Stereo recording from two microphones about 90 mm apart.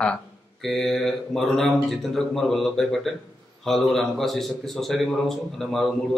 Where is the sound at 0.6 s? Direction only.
5° left (ahead or behind).